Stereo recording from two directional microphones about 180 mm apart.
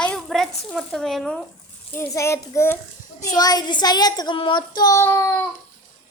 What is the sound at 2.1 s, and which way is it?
Speech, 15° left (ahead or behind).